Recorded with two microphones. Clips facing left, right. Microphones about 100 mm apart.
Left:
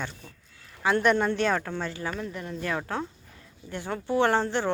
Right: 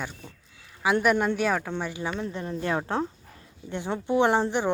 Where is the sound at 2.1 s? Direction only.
30° right (ahead or behind).